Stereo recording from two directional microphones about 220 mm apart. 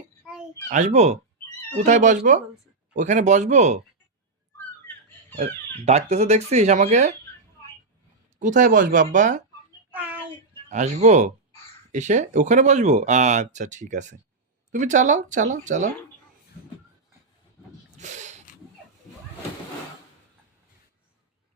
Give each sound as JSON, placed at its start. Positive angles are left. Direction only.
{"t": 0.7, "sound": "speech", "side_deg": -30}
{"t": 5.4, "sound": "speech", "side_deg": -30}
{"t": 8.4, "sound": "speech", "side_deg": -35}
{"t": 9.9, "sound": "child singing", "side_deg": -5}
{"t": 10.2, "sound": "a sound", "side_deg": -30}
{"t": 11.9, "sound": "speech", "side_deg": -35}
{"t": 17.9, "sound": "a sound", "side_deg": -35}